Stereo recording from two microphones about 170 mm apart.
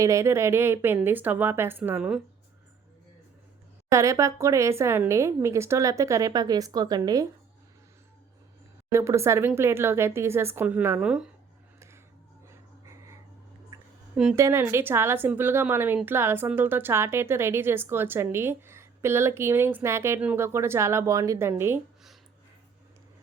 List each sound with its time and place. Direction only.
0.0 s speech: 15° right (ahead or behind)
3.9 s speech: 20° right (ahead or behind)
8.9 s speech: 15° right (ahead or behind)
12.5 s a sound: 15° right (ahead or behind)
14.3 s speech: 15° right (ahead or behind)